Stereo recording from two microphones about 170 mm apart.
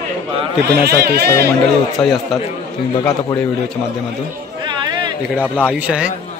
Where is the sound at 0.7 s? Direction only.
70° right (ahead or behind).